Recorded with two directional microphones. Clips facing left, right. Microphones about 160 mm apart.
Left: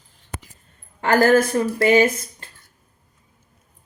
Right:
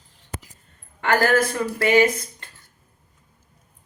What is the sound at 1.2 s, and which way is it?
Speech, 25° left (ahead or behind).